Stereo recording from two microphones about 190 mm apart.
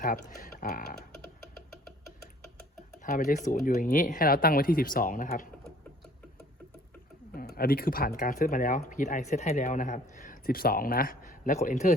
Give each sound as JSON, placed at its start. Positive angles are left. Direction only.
{"t": 0.0, "sound": "speech", "side_deg": 45}
{"t": 3.0, "sound": "speech", "side_deg": 45}
{"t": 7.3, "sound": "speech", "side_deg": 50}